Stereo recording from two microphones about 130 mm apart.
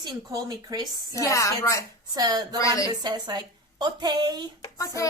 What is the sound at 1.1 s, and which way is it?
Speech, 25° left (ahead or behind).